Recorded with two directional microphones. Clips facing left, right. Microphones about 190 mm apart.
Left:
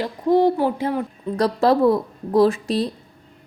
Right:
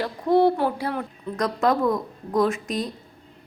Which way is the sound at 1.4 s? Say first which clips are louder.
Left 5 dB; 35° left (ahead or behind).